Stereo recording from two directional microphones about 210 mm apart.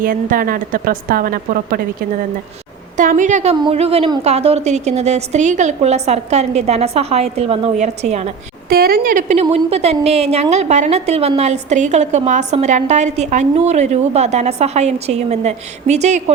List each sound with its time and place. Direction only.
0.0 s a woman's voice: 40° right (ahead or behind)
3.0 s a woman's voice: 35° right (ahead or behind)
3.5 s a woman's voice: 25° right (ahead or behind)
8.7 s a woman's voice: 45° right (ahead or behind)